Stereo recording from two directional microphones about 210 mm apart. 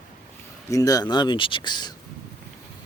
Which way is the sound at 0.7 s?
15° left (ahead or behind).